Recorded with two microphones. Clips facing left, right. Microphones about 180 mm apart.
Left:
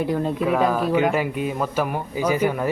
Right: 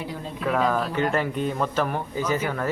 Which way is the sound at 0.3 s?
5° left (ahead or behind).